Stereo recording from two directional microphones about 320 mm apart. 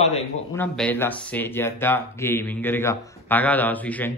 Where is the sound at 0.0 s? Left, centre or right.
Centre.